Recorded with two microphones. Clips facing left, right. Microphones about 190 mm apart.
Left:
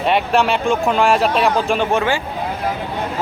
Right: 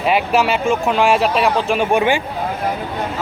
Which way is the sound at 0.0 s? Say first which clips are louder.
Even; 5° right (ahead or behind).